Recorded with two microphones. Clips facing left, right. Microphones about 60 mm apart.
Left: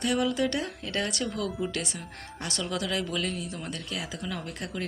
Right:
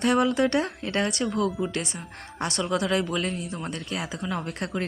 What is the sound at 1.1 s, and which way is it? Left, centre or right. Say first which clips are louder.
Speech: right 5 dB; right.